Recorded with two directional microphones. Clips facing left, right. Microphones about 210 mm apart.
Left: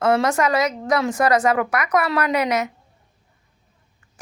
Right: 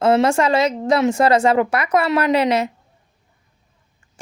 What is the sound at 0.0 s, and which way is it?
Speech, 25° right (ahead or behind).